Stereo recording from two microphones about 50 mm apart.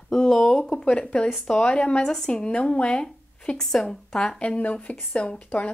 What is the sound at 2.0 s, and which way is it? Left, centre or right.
Speech, centre.